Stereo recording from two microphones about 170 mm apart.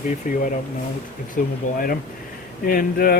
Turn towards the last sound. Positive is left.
turn(degrees=60)  # may be behind; listen again after turning